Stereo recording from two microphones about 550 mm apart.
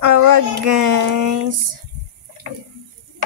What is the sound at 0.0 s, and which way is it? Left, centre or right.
Child singing, right.